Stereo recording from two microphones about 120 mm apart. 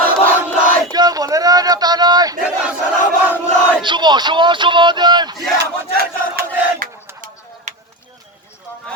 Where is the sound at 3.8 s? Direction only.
40° right (ahead or behind).